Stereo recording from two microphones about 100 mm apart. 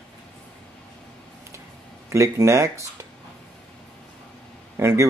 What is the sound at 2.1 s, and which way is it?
Speech, 30° right (ahead or behind).